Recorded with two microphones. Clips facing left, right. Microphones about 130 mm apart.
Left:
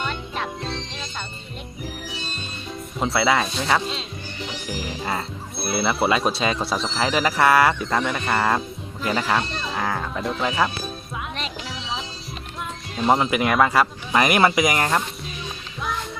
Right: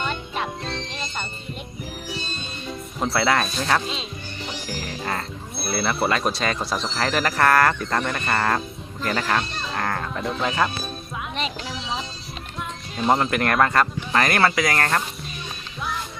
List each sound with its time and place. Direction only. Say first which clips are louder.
0.0 s music: right 1 dB; 5° right (ahead or behind)
3.0 s speech: left 1 dB; centre (ahead or behind)
11.3 s music: right 3 dB; centre (ahead or behind)
13.0 s speech: left 1 dB; centre (ahead or behind)